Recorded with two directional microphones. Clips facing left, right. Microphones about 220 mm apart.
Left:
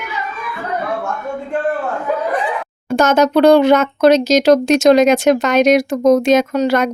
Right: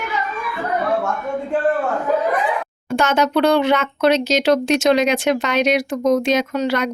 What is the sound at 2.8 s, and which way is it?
Speech, 40° left (ahead or behind).